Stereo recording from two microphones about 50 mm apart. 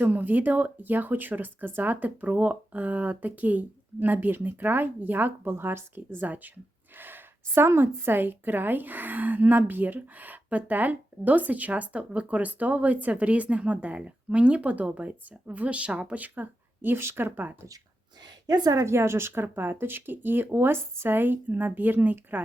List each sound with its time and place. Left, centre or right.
0.0 s a woman's voice: right
6.1 s a woman's voice: right
18.7 s speech: right